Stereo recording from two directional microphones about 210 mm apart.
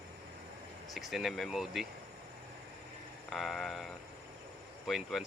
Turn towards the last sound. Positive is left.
turn(degrees=0)  # may be behind; listen again after turning